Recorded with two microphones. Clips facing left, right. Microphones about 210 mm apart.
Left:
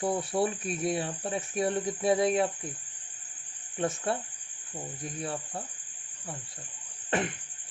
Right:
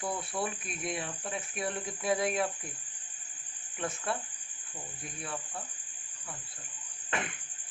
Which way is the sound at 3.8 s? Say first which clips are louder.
Left 5 dB; 35° left (ahead or behind).